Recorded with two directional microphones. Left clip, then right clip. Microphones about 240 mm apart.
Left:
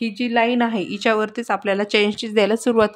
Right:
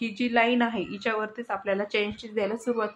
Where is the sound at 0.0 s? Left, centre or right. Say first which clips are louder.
Left 5 dB; left.